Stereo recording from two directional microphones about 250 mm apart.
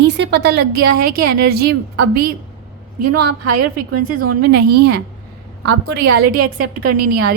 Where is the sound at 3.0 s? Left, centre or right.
Right.